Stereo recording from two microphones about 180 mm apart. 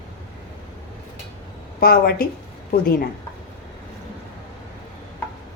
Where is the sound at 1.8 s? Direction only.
55° left (ahead or behind).